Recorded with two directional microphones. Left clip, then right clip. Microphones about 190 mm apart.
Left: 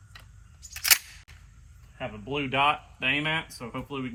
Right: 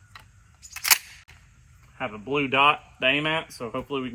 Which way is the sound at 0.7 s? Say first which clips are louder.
Right 1 dB; 15° right (ahead or behind).